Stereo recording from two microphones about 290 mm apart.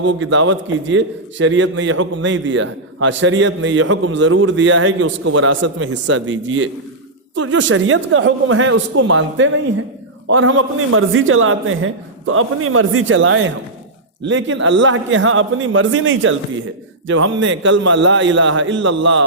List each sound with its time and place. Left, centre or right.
0.0 s a man's voice: right